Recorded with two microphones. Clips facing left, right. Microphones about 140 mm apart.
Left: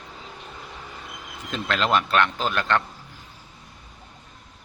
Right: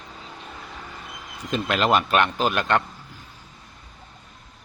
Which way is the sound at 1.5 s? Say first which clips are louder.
Right 2 dB; 15° right (ahead or behind).